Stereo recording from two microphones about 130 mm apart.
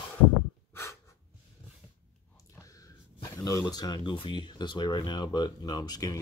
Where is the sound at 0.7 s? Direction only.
20° left (ahead or behind).